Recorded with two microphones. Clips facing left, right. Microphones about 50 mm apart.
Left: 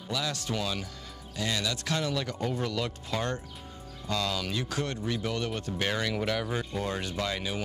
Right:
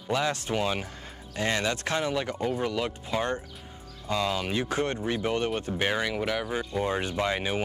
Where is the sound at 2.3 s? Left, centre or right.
Centre.